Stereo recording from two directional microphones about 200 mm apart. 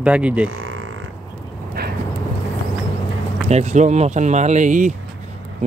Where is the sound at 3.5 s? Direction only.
35° right (ahead or behind).